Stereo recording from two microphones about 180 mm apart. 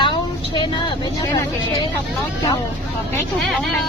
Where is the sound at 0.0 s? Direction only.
25° left (ahead or behind).